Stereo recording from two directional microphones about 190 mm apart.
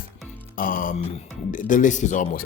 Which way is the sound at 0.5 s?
45° left (ahead or behind).